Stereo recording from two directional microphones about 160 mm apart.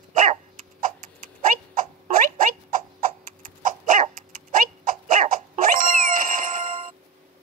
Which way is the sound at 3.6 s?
50° right (ahead or behind).